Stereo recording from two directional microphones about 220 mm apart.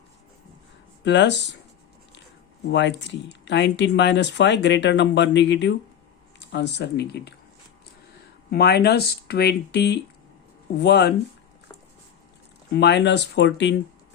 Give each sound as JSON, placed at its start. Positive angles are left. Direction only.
{"t": 1.0, "sound": "speech", "side_deg": 50}
{"t": 2.7, "sound": "speech", "side_deg": 55}
{"t": 8.4, "sound": "speech", "side_deg": 50}
{"t": 12.7, "sound": "speech", "side_deg": 50}